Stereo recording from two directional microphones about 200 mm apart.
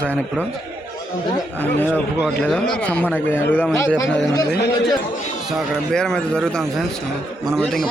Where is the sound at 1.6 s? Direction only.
10° left (ahead or behind).